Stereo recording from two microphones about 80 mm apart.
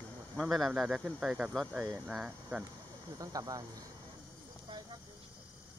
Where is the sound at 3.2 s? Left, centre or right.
Right.